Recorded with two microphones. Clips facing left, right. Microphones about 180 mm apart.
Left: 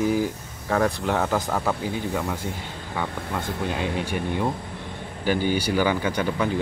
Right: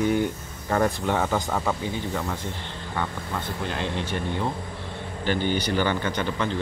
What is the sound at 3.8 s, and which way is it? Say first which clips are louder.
Speech: left 2 dB; 10° left (ahead or behind).